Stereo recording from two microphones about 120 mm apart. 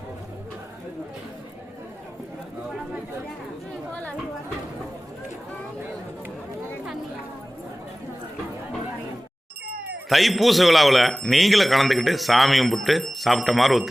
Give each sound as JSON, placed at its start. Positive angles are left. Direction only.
{"t": 10.1, "sound": "a man's voice", "side_deg": 0}